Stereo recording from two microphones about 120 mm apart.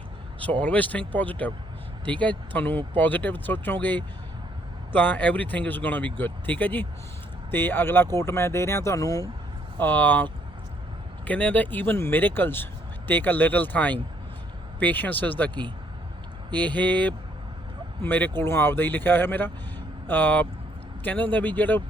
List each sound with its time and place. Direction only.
0.6 s speech: 10° left (ahead or behind); by 9.3 s 30° left (ahead or behind)
9.7 s speech: 15° left (ahead or behind)
11.3 s speech: 15° left (ahead or behind)
16.6 s speech: 15° left (ahead or behind)